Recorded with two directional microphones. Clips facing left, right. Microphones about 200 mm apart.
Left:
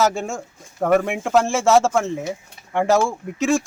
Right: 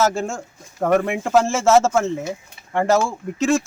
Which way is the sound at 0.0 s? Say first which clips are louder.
Even; centre (ahead or behind).